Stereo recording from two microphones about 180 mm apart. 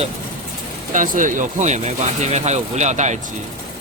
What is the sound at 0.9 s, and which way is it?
Speech, 45° right (ahead or behind).